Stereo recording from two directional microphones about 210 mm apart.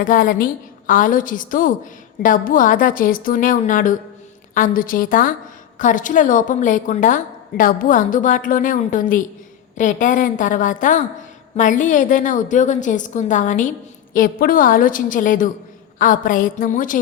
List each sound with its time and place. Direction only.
0.0 s a woman's voice: 40° left (ahead or behind)